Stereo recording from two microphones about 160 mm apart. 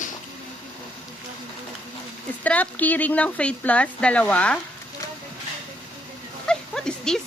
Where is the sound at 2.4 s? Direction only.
10° left (ahead or behind).